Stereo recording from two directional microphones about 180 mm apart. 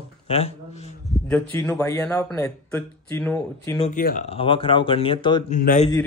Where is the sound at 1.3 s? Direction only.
15° left (ahead or behind).